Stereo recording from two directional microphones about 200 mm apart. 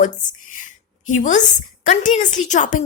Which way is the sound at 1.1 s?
40° left (ahead or behind).